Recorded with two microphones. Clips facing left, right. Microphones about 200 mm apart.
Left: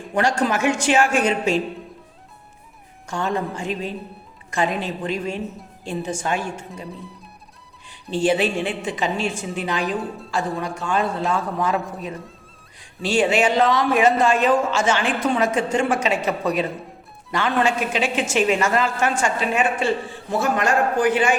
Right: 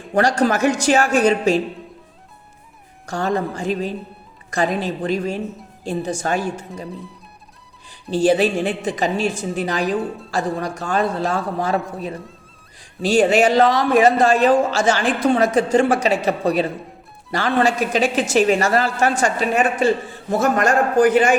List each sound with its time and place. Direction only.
0.1 s speech: 35° right (ahead or behind)
3.1 s speech: 35° right (ahead or behind)
8.1 s speech: 40° right (ahead or behind)
13.0 s a man's voice: 40° right (ahead or behind)